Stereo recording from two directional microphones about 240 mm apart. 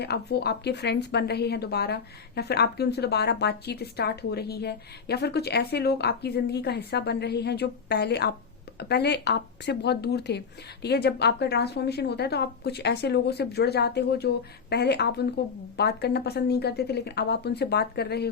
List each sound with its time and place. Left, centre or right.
0.0 s a woman's voice: left